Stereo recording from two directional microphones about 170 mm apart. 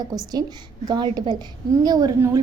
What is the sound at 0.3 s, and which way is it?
A woman's voice, 25° right (ahead or behind).